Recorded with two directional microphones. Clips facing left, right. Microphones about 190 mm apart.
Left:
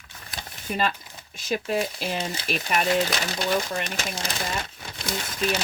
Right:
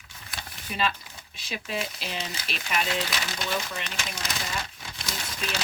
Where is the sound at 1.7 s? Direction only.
50° left (ahead or behind).